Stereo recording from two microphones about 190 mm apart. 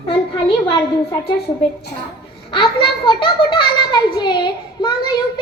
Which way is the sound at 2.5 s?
25° left (ahead or behind).